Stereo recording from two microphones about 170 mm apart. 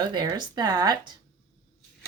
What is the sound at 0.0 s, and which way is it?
Speech, 25° right (ahead or behind).